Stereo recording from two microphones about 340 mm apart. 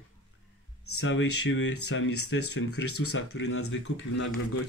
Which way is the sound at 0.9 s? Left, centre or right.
Left.